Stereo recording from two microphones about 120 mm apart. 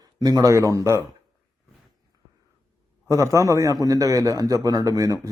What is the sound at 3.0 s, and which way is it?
A man's voice, 25° right (ahead or behind).